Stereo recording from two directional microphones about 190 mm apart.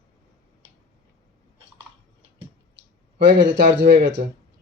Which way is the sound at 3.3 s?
65° right (ahead or behind).